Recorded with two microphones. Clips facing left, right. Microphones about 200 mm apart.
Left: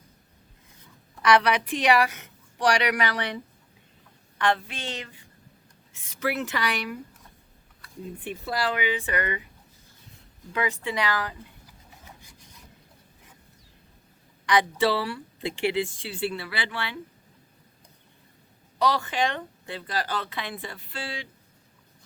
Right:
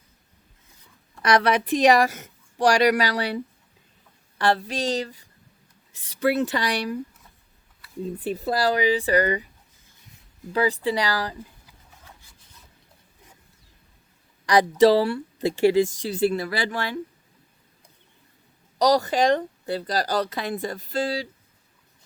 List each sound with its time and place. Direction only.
1.2 s speech: 40° right (ahead or behind)
4.4 s speech: 35° right (ahead or behind)
8.2 s speech: 35° right (ahead or behind)
10.5 s speech: 35° right (ahead or behind)
12.0 s rub: 15° left (ahead or behind)
14.4 s speech: 40° right (ahead or behind)
18.8 s speech: 40° right (ahead or behind)